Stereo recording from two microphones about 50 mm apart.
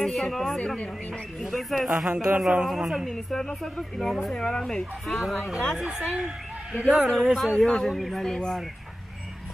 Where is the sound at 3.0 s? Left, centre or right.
Centre.